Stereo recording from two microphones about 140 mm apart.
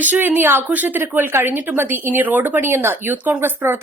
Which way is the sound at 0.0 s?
15° right (ahead or behind).